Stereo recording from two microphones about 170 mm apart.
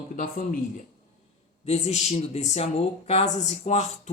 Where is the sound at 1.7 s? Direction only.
40° left (ahead or behind).